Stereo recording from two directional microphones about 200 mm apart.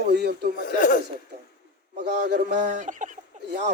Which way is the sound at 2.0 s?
55° right (ahead or behind).